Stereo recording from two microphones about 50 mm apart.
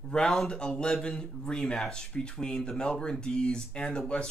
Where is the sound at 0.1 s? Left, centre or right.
Centre.